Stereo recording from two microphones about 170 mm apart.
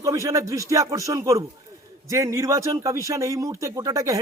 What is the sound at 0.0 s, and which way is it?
A man's voice, 15° right (ahead or behind).